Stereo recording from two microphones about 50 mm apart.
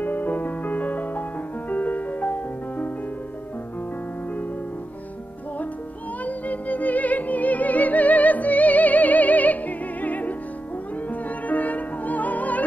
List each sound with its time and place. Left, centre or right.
0.0 s music: left
6.2 s music: left